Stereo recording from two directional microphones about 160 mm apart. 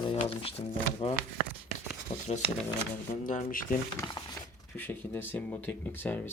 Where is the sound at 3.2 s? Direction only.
60° left (ahead or behind).